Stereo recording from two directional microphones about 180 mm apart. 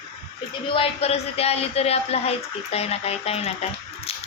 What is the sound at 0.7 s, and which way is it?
Speech, 30° left (ahead or behind).